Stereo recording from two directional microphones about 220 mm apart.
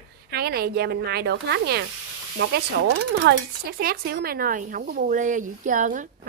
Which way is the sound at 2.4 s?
55° right (ahead or behind).